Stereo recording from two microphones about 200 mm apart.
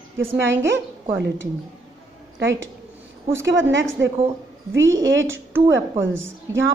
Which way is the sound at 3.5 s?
70° right (ahead or behind).